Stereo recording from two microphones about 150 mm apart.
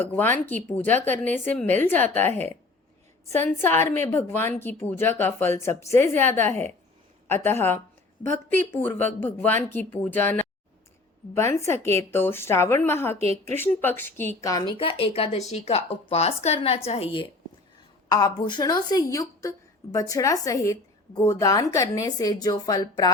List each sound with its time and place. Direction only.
0.0 s a woman's voice: 10° left (ahead or behind); by 17.2 s 40° left (ahead or behind)
18.1 s a woman's voice: 25° left (ahead or behind)